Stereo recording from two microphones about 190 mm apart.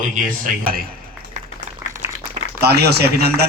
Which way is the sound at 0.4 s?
50° right (ahead or behind).